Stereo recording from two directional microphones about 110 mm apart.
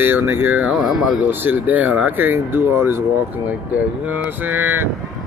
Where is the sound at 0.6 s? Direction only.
5° right (ahead or behind).